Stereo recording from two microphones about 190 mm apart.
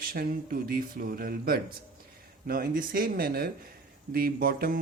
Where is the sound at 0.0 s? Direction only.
50° right (ahead or behind).